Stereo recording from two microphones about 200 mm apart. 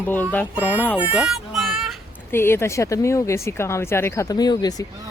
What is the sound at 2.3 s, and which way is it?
Speech, 10° left (ahead or behind).